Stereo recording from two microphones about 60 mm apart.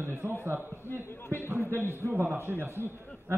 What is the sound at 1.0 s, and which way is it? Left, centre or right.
Speech, left.